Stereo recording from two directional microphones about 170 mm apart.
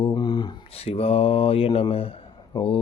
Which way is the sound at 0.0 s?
25° left (ahead or behind).